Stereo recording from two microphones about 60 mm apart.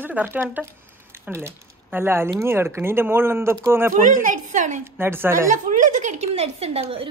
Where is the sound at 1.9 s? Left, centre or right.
Right.